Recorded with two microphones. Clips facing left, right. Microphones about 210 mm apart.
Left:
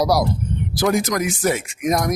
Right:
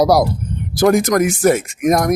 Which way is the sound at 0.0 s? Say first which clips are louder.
Right 5 dB; 50° right (ahead or behind).